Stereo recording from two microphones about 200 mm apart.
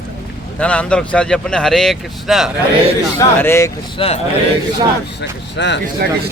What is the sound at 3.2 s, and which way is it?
Speech, 15° left (ahead or behind).